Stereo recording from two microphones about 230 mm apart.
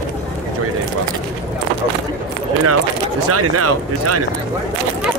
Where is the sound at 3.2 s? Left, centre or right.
Right.